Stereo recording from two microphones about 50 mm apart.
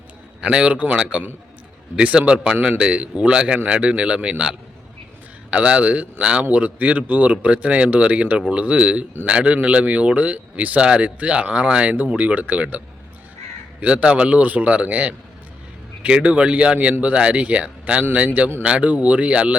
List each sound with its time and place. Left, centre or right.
0.5 s speech: right
13.8 s speech: right